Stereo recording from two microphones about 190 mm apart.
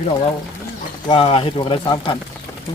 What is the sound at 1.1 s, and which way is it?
Speech, 30° left (ahead or behind).